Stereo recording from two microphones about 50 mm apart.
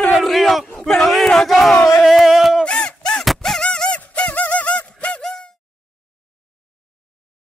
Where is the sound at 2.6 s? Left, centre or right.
Centre.